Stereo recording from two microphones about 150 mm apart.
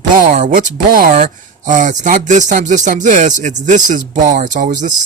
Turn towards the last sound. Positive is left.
turn(degrees=-55)  # may be behind; listen again after turning